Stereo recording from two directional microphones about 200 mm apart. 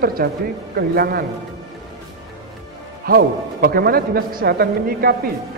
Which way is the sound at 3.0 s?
50° right (ahead or behind).